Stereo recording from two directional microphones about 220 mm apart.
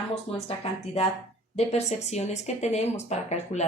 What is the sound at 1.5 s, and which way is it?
Speech, 30° left (ahead or behind).